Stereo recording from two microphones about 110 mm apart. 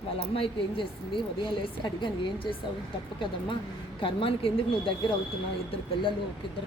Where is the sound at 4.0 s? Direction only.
55° left (ahead or behind).